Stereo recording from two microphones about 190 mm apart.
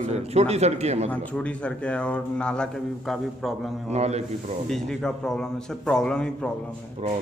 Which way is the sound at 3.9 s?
35° right (ahead or behind).